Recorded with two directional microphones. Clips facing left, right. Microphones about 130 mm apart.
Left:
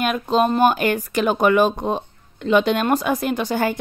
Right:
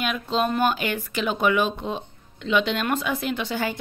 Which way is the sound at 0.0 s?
45° left (ahead or behind).